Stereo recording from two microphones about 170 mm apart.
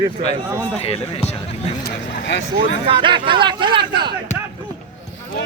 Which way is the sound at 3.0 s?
30° right (ahead or behind).